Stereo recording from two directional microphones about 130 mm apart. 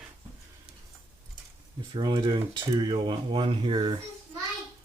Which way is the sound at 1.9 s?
35° right (ahead or behind).